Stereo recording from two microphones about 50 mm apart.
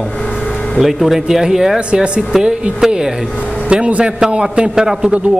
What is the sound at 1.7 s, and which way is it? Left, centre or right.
Speech, right.